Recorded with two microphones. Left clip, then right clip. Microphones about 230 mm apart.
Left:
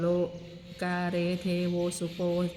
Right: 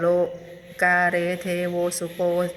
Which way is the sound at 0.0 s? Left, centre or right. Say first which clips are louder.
Right 8 dB; centre.